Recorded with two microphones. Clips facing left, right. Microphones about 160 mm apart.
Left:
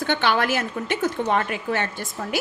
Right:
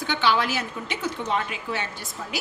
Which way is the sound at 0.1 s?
55° left (ahead or behind).